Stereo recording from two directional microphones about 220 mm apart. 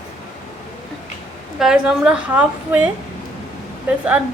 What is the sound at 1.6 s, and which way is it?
A woman's voice, 5° right (ahead or behind).